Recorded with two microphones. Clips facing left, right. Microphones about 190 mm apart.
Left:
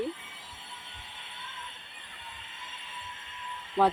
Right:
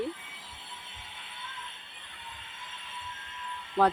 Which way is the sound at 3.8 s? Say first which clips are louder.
Even; centre (ahead or behind).